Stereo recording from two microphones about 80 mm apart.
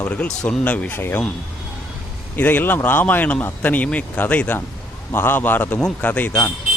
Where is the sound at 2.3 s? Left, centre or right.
Left.